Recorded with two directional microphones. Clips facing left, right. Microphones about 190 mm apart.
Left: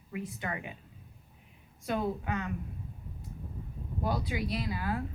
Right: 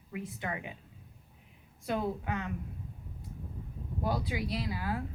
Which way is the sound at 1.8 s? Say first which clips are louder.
Left 1 dB; 20° right (ahead or behind).